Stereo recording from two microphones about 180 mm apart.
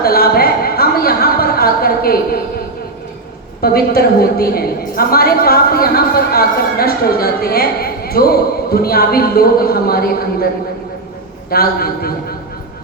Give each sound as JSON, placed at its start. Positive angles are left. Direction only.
{"t": 0.0, "sound": "a sound", "side_deg": 55}
{"t": 3.6, "sound": "a woman's voice", "side_deg": 55}
{"t": 11.5, "sound": "a woman's voice", "side_deg": 55}